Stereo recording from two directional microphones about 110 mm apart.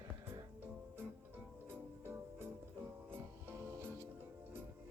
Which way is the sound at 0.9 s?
20° right (ahead or behind).